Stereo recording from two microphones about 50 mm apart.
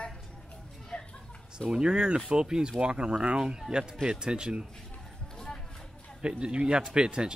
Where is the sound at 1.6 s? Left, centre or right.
Centre.